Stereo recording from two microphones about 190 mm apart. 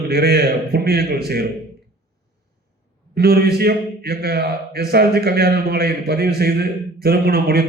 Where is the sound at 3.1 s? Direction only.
55° right (ahead or behind).